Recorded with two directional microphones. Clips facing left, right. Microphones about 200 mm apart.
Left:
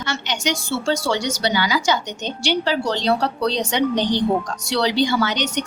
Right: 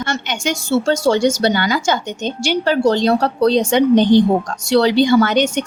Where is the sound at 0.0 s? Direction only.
50° right (ahead or behind).